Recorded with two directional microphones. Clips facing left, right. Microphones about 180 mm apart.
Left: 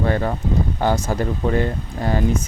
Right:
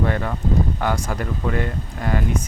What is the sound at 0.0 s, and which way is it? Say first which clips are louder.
Speech: left 2 dB; 30° left (ahead or behind).